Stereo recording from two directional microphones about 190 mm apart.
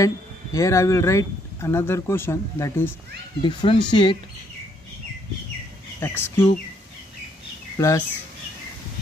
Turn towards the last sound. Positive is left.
turn(degrees=15)  # may be behind; listen again after turning